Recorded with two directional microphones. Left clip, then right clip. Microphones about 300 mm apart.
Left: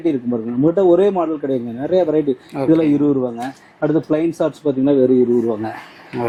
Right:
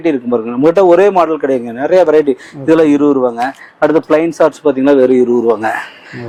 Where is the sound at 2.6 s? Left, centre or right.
Centre.